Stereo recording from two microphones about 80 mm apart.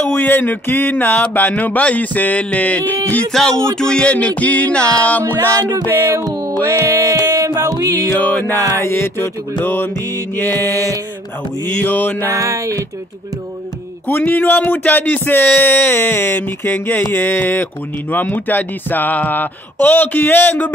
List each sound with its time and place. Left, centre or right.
0.0 s speech: left
3.3 s a sound: centre
4.4 s speech: centre
6.1 s music: right
8.2 s speech: left
11.6 s speech: left
12.2 s music: right
14.0 s speech: left